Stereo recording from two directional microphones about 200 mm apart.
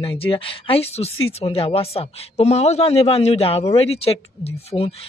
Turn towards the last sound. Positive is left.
turn(degrees=30)  # may be behind; listen again after turning